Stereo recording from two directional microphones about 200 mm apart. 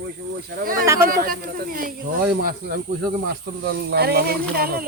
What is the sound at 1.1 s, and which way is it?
Speech, 45° right (ahead or behind).